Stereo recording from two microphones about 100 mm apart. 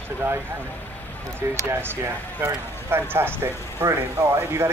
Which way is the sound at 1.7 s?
20° right (ahead or behind).